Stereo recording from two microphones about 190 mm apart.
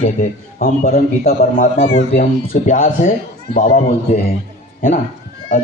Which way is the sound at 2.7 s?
35° left (ahead or behind).